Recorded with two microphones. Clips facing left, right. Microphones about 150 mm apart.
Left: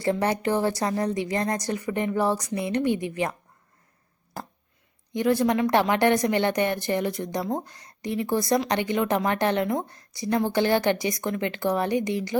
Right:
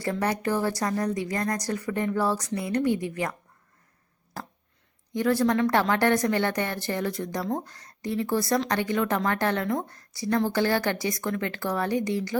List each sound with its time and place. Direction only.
0.0 s a woman's voice: 25° left (ahead or behind)
5.1 s a woman's voice: 20° left (ahead or behind)